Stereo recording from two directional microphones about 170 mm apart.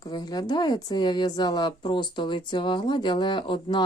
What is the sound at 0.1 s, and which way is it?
Speech, 25° left (ahead or behind).